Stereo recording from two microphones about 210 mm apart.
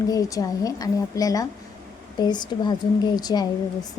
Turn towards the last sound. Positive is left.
turn(degrees=20)  # may be behind; listen again after turning